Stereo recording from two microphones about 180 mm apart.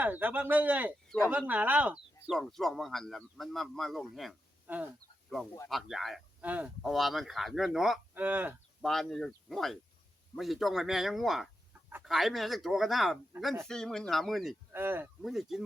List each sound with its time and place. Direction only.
0.0 s speech: 10° right (ahead or behind)
1.0 s speech: 5° left (ahead or behind)
1.3 s speech: 10° right (ahead or behind)
8.8 s speech: centre (ahead or behind)
14.7 s speech: 10° right (ahead or behind)
15.2 s speech: centre (ahead or behind)